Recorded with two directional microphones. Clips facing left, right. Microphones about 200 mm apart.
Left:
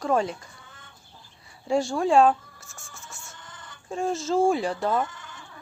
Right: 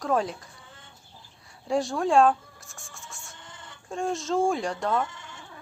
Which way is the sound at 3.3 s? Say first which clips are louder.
Even; 25° right (ahead or behind).